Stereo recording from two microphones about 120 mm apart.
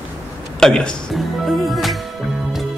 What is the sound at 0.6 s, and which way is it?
Speech, 5° left (ahead or behind).